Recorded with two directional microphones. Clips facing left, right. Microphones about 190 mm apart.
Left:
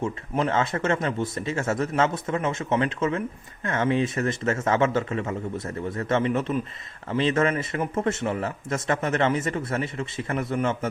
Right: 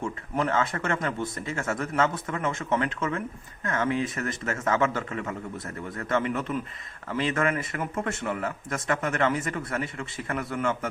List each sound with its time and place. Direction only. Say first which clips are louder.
0.0 s speech: left 3 dB; 20° left (ahead or behind)